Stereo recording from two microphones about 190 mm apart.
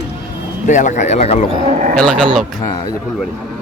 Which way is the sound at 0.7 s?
40° left (ahead or behind).